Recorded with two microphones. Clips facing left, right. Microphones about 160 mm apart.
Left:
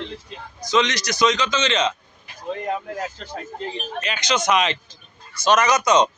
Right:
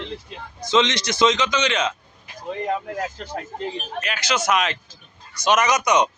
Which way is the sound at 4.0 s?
5° right (ahead or behind).